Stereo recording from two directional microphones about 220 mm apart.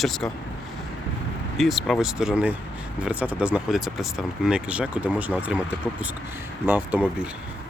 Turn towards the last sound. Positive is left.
turn(degrees=-5)  # may be behind; listen again after turning